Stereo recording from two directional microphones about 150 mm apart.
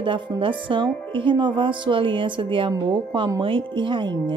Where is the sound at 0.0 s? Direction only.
35° right (ahead or behind).